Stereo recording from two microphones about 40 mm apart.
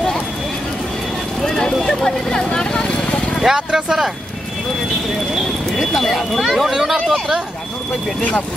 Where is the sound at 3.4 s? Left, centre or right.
Centre.